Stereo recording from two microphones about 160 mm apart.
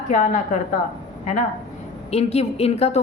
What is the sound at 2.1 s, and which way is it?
Speech, 40° left (ahead or behind).